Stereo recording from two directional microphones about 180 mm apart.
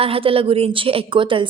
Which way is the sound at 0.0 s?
30° right (ahead or behind).